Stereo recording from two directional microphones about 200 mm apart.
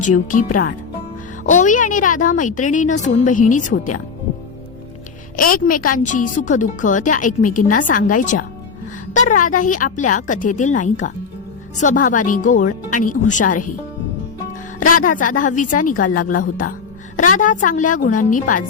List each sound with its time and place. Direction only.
0.0 s a woman's voice: 40° left (ahead or behind)
5.4 s a woman's voice: 45° left (ahead or behind)
14.9 s a woman's voice: 40° left (ahead or behind)